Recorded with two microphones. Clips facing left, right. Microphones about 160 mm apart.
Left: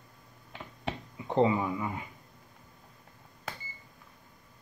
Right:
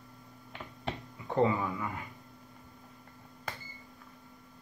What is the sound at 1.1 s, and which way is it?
Speech, 20° left (ahead or behind).